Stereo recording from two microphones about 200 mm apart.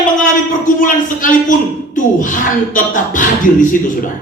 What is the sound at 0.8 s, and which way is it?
Speech, 40° left (ahead or behind).